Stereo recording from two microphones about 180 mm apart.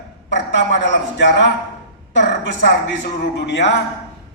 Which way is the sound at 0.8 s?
75° left (ahead or behind).